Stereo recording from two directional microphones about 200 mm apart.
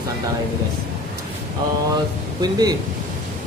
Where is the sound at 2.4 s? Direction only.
20° right (ahead or behind).